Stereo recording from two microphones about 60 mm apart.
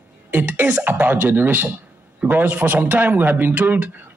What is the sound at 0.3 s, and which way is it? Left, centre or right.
A man's voice, right.